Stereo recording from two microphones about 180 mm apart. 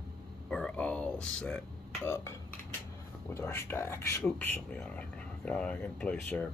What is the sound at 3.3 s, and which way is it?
Speech, 15° left (ahead or behind).